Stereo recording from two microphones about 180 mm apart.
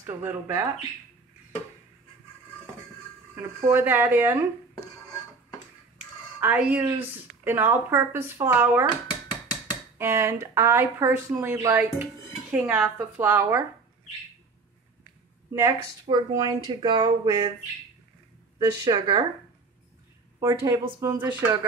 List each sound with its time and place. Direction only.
0.0 s speech: 10° right (ahead or behind)
3.3 s speech: 10° right (ahead or behind)
6.4 s speech: 10° right (ahead or behind)
9.0 s dishes: 25° left (ahead or behind)
9.9 s speech: 15° right (ahead or behind)
15.5 s speech: 20° right (ahead or behind)
18.6 s speech: 25° right (ahead or behind)
20.3 s speech: 20° right (ahead or behind)